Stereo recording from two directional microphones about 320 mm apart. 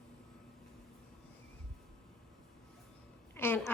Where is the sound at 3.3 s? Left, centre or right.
Centre.